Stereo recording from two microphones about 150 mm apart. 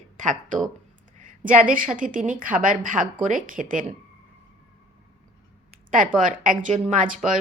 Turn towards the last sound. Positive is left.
turn(degrees=-60)  # may be behind; listen again after turning